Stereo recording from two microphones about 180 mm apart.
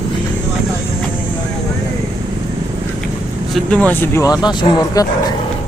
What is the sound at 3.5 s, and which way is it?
Speech, 5° left (ahead or behind).